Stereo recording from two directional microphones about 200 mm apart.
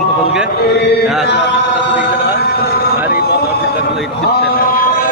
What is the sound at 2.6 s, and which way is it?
Vehicle, 50° left (ahead or behind).